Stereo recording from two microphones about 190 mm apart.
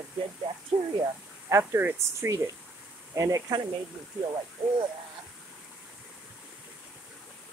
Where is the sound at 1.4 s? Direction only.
10° right (ahead or behind).